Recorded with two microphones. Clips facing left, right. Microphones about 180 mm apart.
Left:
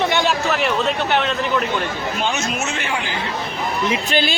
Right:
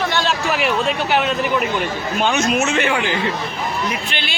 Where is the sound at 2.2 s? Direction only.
65° right (ahead or behind).